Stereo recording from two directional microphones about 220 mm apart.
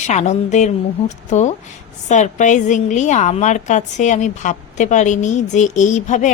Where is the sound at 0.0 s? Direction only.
30° left (ahead or behind).